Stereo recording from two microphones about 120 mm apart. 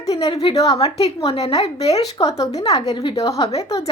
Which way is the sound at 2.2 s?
30° left (ahead or behind).